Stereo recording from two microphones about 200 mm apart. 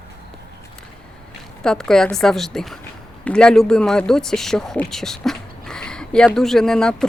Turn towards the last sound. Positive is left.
turn(degrees=5)  # may be behind; listen again after turning